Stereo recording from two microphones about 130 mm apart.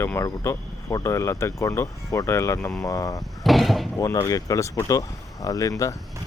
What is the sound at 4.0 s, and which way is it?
Speech, 25° left (ahead or behind).